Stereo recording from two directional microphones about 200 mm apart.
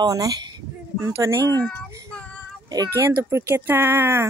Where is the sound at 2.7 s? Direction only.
15° right (ahead or behind).